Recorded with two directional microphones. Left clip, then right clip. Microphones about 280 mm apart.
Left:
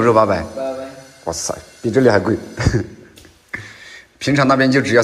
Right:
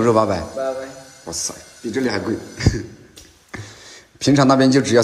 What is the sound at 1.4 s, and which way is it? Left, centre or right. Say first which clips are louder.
Speech: left 6 dB; right.